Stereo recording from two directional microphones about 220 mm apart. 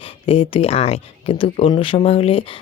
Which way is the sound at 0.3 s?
25° left (ahead or behind).